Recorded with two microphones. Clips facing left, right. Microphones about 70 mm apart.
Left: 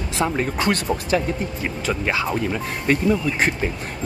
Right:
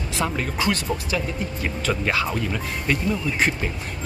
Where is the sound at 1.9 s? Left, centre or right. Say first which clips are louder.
Even; centre.